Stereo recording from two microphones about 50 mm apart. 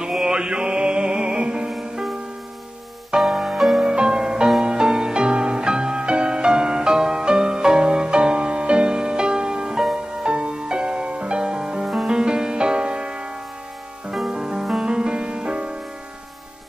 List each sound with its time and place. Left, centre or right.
0.1 s music: centre
1.7 s music: centre
3.2 s music: centre